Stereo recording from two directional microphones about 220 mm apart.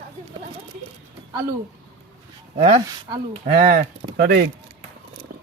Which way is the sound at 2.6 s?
25° right (ahead or behind).